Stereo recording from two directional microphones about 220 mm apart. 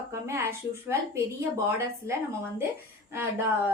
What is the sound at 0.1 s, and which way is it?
A woman's voice, 10° right (ahead or behind).